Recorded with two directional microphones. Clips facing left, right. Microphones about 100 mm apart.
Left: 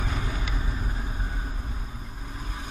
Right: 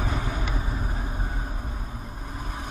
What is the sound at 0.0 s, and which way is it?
Vehicle, 15° right (ahead or behind).